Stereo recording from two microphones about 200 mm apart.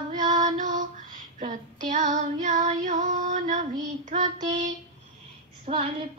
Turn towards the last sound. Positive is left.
turn(degrees=-30)  # may be behind; listen again after turning